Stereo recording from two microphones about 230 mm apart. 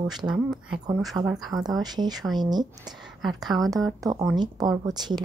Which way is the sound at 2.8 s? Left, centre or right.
Centre.